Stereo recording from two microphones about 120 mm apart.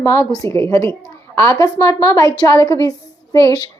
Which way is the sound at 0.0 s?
20° left (ahead or behind).